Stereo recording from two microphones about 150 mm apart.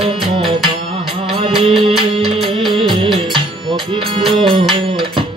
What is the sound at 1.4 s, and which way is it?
Music, 35° right (ahead or behind).